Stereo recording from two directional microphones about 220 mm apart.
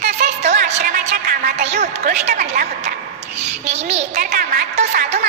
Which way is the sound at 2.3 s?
40° right (ahead or behind).